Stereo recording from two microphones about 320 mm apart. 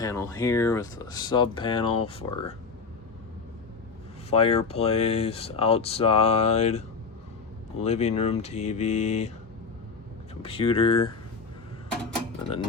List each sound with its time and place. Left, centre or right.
0.0 s speech: centre
4.3 s speech: centre
7.9 s speech: centre
10.4 s speech: centre